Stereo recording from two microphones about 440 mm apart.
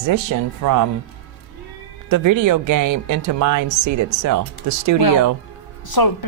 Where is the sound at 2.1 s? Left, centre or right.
Right.